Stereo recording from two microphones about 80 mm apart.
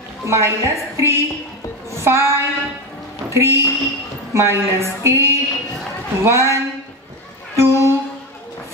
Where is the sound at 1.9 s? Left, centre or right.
Right.